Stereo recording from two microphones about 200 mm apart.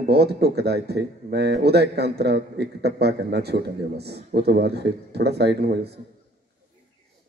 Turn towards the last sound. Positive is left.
turn(degrees=-55)  # may be behind; listen again after turning